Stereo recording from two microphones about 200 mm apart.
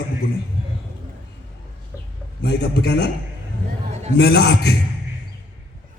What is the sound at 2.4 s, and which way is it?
Speech, 55° left (ahead or behind).